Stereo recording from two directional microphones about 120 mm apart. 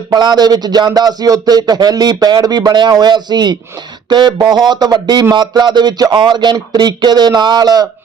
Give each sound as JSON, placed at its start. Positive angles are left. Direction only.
{"t": 0.1, "sound": "speech", "side_deg": -35}